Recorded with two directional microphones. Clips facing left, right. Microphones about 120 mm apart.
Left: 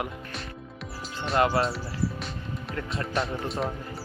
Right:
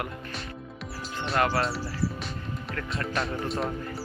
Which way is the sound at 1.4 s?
20° left (ahead or behind).